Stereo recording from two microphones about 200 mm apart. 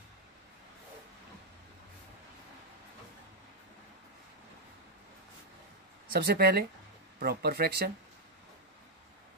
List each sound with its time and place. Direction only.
6.1 s speech: 50° right (ahead or behind)